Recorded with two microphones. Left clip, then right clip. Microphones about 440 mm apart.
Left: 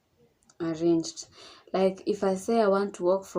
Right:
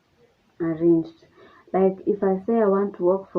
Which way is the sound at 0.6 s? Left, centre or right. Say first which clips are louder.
Right 6 dB; right.